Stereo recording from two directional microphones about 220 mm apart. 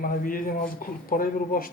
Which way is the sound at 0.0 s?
40° left (ahead or behind).